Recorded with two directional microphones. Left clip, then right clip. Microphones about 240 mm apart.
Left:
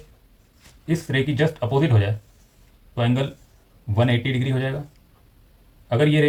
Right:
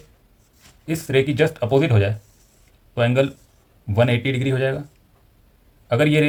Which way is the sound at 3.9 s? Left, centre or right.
Right.